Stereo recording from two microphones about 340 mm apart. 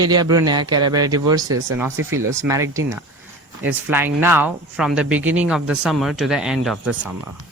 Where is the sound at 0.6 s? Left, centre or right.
Right.